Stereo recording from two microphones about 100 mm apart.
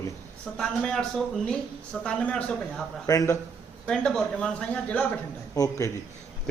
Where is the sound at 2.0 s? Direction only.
10° left (ahead or behind).